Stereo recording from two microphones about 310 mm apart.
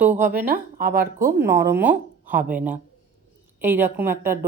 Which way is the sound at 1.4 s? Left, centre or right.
Centre.